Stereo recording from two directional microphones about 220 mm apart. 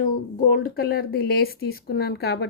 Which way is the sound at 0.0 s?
40° left (ahead or behind).